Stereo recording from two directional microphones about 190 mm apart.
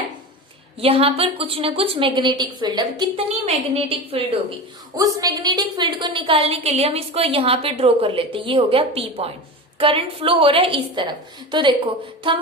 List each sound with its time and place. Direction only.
0.8 s a woman's voice: 30° right (ahead or behind)
3.2 s a woman's voice: 35° right (ahead or behind)
4.9 s a woman's voice: 20° right (ahead or behind)
12.2 s a woman's voice: 25° right (ahead or behind)